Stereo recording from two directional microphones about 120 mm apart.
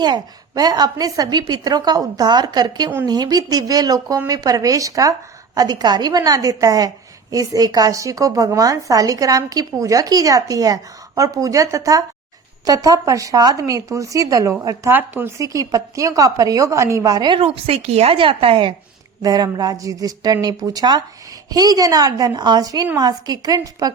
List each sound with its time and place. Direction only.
0.0 s a woman's voice: 35° right (ahead or behind)
14.8 s speech: 15° right (ahead or behind)
15.4 s a woman's voice: 30° right (ahead or behind)
17.4 s a woman's voice: 55° right (ahead or behind)
19.2 s a woman's voice: 30° right (ahead or behind)